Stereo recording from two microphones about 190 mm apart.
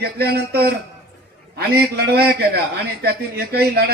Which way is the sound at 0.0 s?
55° right (ahead or behind).